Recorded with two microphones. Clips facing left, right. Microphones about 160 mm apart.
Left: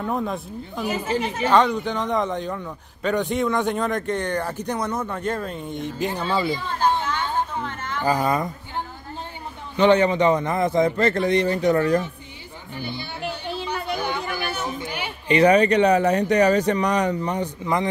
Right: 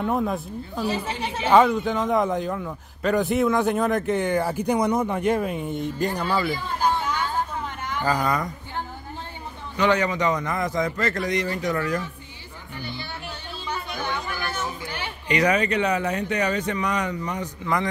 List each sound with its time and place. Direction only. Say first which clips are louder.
0.0 s a man's voice: right 2 dB; 5° right (ahead or behind)
6.3 s a man's voice: left 1 dB; 20° left (ahead or behind)
7.6 s a sound: left 1 dB; 15° right (ahead or behind)
8.0 s a man's voice: left 2 dB; 20° left (ahead or behind)
12.7 s speech: left 3 dB; 15° left (ahead or behind)
13.7 s a sound: left 2 dB; 15° left (ahead or behind)
15.3 s speech: left 6 dB; 30° left (ahead or behind)